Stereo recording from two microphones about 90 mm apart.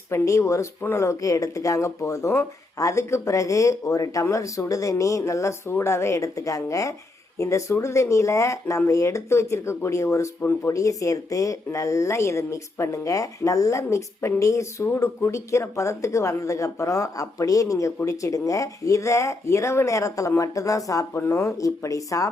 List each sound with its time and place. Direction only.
0.1 s speech: 35° left (ahead or behind)
14.8 s speech: 25° left (ahead or behind); by 22.3 s 40° left (ahead or behind)